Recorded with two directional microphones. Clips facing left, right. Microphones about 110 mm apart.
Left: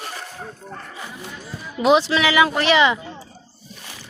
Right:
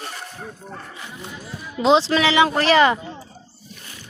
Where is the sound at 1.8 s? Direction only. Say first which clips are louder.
Even; 30° right (ahead or behind).